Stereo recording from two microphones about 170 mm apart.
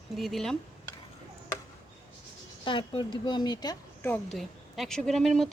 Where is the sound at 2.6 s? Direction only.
30° left (ahead or behind).